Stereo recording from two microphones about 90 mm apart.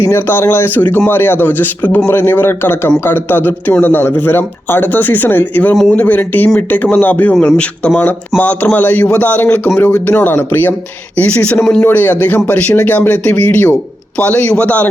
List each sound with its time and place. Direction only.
0.0 s a man's voice: 25° left (ahead or behind)
5.7 s speech: 5° left (ahead or behind)
6.0 s a man's voice: 20° left (ahead or behind)